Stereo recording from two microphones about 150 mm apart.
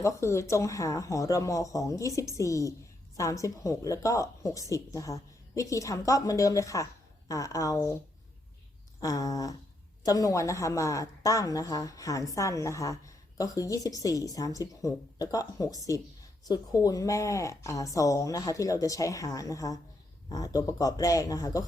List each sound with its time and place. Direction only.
0.0 s a woman's voice: 20° left (ahead or behind)
9.0 s a woman's voice: 25° left (ahead or behind)